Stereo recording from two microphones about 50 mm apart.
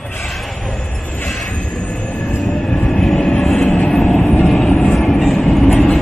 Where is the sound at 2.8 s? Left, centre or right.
Centre.